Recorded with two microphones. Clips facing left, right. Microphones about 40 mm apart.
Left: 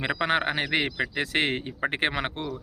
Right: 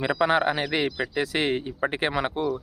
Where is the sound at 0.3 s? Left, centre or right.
Left.